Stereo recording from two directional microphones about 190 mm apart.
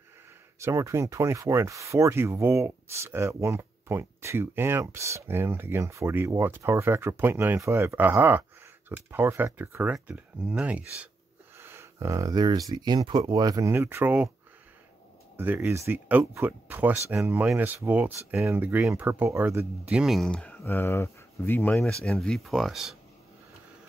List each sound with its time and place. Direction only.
0.6 s speech: 15° right (ahead or behind)
15.3 s speech: 10° right (ahead or behind)